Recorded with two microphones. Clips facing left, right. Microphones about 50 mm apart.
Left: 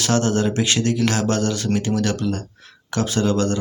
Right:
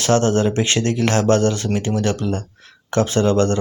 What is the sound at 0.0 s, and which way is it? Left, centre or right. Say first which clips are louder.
Speech: right 3 dB; right.